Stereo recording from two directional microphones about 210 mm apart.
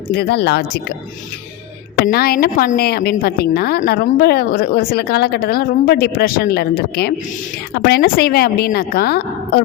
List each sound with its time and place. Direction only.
0.1 s speech: 50° left (ahead or behind)
2.0 s speech: 45° left (ahead or behind)